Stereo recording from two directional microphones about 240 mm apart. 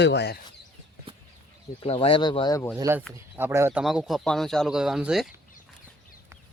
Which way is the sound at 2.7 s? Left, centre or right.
Centre.